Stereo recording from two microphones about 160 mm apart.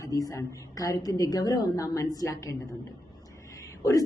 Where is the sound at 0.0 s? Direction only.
20° left (ahead or behind).